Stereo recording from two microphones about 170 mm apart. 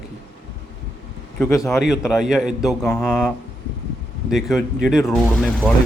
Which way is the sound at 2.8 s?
10° left (ahead or behind).